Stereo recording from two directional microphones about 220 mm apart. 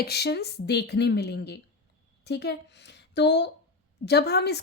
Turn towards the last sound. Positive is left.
turn(degrees=50)  # may be behind; listen again after turning